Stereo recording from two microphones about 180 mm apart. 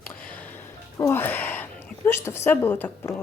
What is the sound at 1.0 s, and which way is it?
A woman's voice, 10° left (ahead or behind).